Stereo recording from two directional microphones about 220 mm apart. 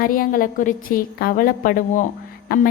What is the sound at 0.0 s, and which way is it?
A woman's voice, 40° left (ahead or behind).